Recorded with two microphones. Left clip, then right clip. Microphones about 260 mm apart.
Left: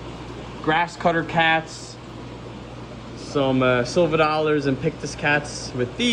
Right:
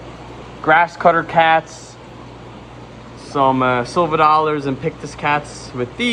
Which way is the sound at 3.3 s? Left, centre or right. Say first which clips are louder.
Right 5 dB; right.